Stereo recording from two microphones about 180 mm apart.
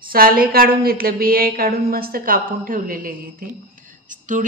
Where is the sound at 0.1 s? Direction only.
55° right (ahead or behind).